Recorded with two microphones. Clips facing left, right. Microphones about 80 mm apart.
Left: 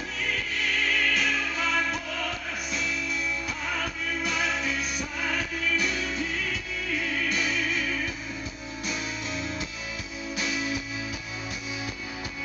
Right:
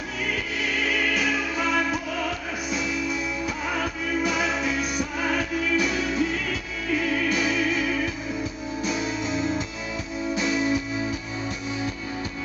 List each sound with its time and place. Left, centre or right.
0.3 s music: centre
7.2 s music: centre
10.5 s music: right